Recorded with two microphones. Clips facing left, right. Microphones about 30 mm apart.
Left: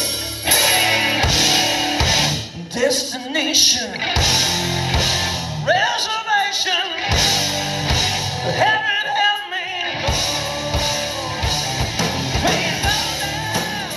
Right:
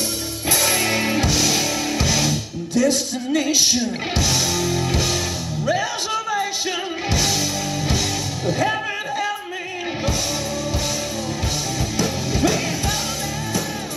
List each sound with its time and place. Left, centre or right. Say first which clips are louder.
0.5 s music: left 4 dB; left
5.7 s music: left 5 dB; left
12.0 s music: right 1 dB; left